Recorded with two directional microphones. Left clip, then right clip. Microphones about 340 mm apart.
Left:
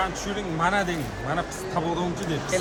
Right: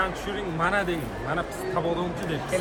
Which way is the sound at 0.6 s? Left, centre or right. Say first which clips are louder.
Left 1 dB; left.